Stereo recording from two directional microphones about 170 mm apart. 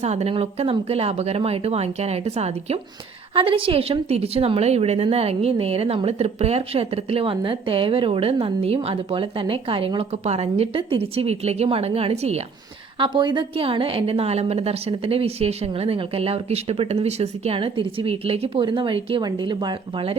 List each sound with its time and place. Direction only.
0.0 s a woman's voice: 40° right (ahead or behind)
13.0 s a woman's voice: 30° right (ahead or behind)